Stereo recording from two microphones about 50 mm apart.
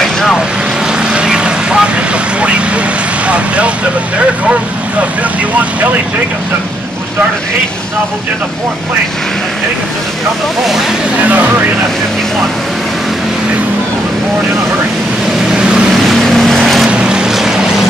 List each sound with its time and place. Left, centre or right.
0.0 s vehicle: centre
1.1 s vehicle: centre
15.9 s vehicle: centre
16.9 s vehicle: centre